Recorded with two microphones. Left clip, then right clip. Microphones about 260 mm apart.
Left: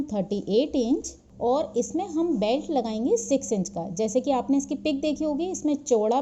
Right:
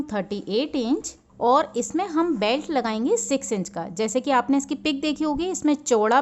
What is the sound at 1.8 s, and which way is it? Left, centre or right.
Speech, right.